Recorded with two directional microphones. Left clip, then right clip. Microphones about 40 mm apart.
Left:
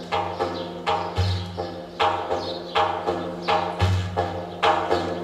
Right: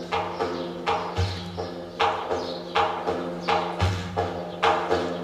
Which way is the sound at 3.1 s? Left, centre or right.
Centre.